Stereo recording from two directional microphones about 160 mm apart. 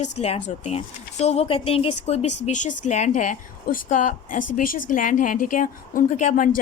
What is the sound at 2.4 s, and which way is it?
A woman's voice, 50° left (ahead or behind).